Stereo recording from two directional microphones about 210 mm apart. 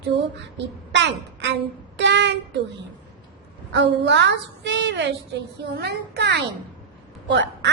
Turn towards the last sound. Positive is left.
turn(degrees=-55)  # may be behind; listen again after turning